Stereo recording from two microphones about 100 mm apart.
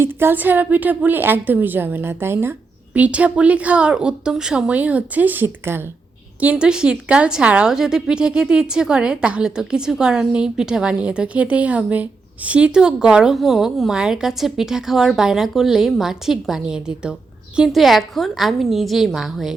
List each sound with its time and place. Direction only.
0.0 s a woman's voice: 20° right (ahead or behind); by 19.5 s centre (ahead or behind)